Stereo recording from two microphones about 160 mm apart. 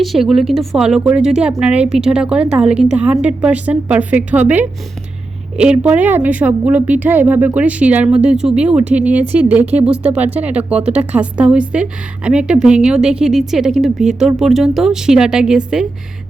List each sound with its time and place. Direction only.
0.0 s a woman's voice: centre (ahead or behind)